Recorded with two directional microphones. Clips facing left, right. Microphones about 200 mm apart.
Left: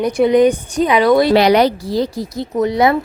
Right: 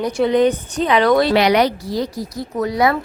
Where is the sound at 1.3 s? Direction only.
35° left (ahead or behind).